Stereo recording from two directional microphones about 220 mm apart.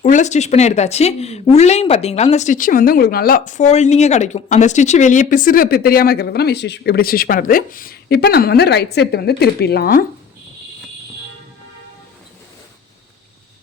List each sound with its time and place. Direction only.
0.0 s a woman's voice: 35° left (ahead or behind)